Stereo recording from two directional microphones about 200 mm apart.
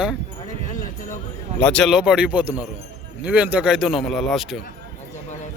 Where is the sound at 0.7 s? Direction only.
40° left (ahead or behind).